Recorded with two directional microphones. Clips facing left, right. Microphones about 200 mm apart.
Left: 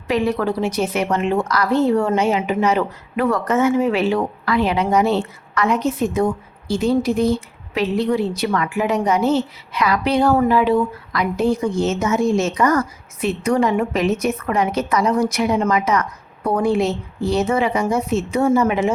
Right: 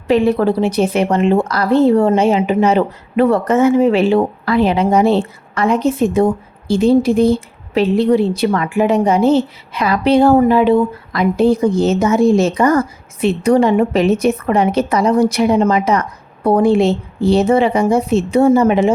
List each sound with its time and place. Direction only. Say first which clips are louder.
0.1 s a woman's voice: right 6 dB; 30° right (ahead or behind)